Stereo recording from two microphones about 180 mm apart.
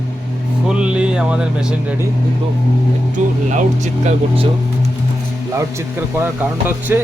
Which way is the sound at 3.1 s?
45° right (ahead or behind).